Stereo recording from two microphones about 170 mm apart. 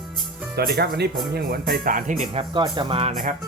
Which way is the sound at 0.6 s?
65° right (ahead or behind).